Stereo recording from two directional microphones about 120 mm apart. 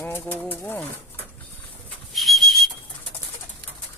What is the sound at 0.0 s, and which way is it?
Speech, 15° left (ahead or behind).